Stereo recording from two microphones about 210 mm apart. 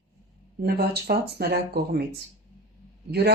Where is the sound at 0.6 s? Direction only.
50° right (ahead or behind).